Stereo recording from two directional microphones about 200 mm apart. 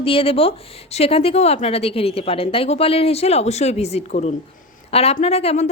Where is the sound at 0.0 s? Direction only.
25° left (ahead or behind).